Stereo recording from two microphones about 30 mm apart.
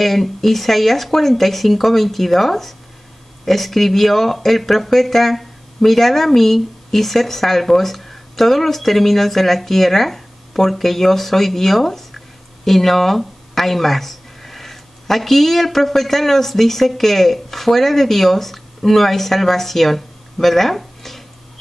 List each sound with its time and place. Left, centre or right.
0.0 s a woman's voice: centre